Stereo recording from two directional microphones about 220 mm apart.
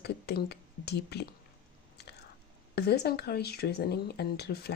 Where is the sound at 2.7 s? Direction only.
45° left (ahead or behind).